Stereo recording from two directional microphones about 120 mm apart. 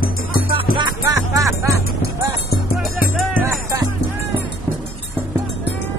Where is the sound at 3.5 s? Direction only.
30° right (ahead or behind).